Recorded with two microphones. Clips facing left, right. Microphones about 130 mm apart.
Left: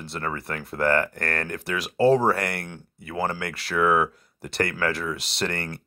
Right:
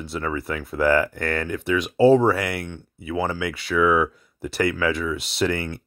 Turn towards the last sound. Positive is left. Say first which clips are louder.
# right 5 dB
turn(degrees=0)  # may be behind; listen again after turning